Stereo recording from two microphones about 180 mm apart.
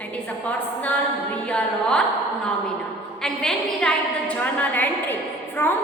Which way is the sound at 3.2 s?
Centre (ahead or behind).